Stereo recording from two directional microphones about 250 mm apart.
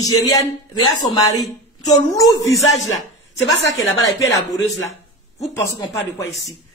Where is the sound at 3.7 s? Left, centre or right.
Centre.